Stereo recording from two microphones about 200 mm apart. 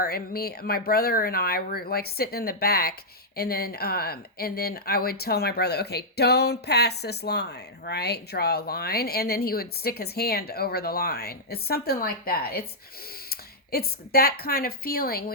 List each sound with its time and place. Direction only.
0.0 s a woman's voice: 50° left (ahead or behind)